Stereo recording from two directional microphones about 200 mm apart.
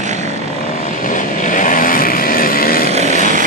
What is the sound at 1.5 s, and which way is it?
Vehicle, 40° left (ahead or behind).